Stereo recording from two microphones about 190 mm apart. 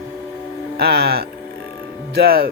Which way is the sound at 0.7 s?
55° right (ahead or behind).